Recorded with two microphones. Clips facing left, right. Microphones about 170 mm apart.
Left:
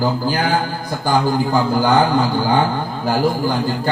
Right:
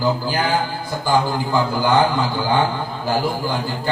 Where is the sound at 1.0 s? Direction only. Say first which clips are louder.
Left 2 dB; 45° left (ahead or behind).